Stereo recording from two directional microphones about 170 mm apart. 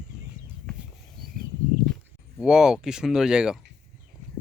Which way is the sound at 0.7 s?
5° left (ahead or behind).